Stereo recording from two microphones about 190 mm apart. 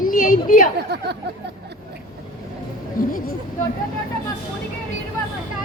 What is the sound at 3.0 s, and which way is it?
Speech, 45° left (ahead or behind).